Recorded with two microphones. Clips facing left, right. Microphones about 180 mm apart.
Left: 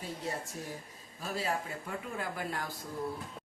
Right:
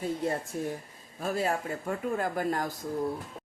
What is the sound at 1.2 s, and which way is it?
Speech, 50° right (ahead or behind).